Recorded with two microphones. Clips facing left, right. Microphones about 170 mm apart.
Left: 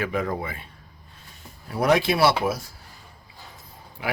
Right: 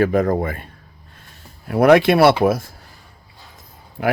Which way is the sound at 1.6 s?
60° right (ahead or behind).